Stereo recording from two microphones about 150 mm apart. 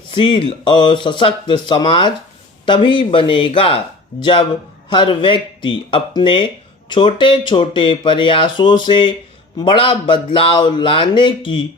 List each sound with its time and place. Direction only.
0.1 s speech: 35° left (ahead or behind)